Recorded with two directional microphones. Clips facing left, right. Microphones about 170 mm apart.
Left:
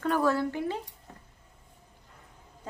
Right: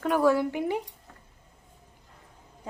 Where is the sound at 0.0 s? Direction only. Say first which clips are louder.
Right 3 dB; 10° right (ahead or behind).